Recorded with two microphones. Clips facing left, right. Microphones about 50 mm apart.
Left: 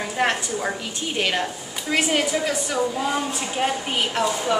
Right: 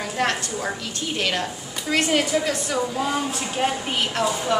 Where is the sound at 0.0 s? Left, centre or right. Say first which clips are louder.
Left 1 dB; centre.